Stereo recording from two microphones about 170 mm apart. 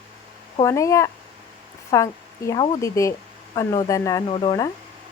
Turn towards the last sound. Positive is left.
turn(degrees=25)  # may be behind; listen again after turning